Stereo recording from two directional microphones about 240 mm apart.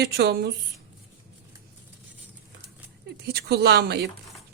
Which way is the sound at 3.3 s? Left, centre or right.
Right.